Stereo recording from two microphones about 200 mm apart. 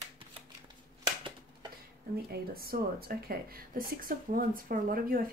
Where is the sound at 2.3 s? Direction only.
50° right (ahead or behind).